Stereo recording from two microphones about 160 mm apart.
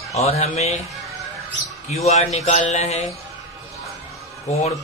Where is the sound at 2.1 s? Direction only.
45° left (ahead or behind).